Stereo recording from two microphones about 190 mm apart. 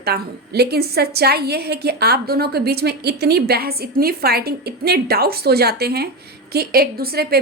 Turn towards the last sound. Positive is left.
turn(degrees=-55)  # may be behind; listen again after turning